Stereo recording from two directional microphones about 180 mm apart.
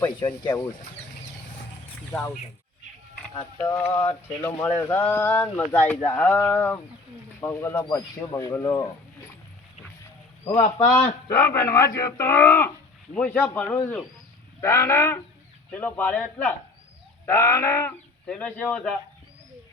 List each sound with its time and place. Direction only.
0.3 s speech: 10° left (ahead or behind)
2.0 s speech: 10° left (ahead or behind)
3.3 s speech: 15° left (ahead or behind)
11.0 s speech: 15° left (ahead or behind)